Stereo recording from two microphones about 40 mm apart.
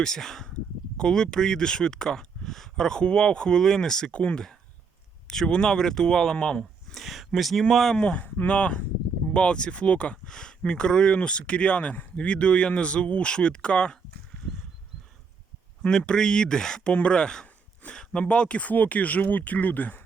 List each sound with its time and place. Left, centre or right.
0.0 s speech: centre
4.1 s speech: left
5.3 s speech: centre
6.9 s speech: centre
8.0 s speech: left
10.2 s speech: centre
15.9 s speech: centre
16.9 s speech: left